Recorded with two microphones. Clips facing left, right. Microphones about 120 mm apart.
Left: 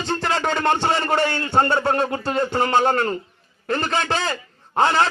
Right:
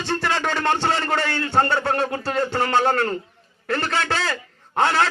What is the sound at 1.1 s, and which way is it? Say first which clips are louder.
Speech: left 2 dB; 25° left (ahead or behind).